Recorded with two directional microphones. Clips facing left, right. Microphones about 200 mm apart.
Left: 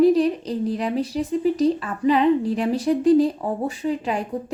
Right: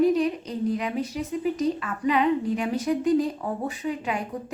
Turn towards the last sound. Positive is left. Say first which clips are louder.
# left 4 dB
turn(degrees=30)  # may be behind; listen again after turning